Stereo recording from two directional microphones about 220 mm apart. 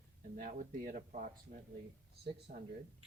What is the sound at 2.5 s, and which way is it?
Speech, 50° right (ahead or behind).